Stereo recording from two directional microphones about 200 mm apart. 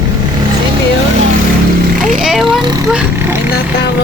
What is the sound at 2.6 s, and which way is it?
Vehicle, 20° right (ahead or behind).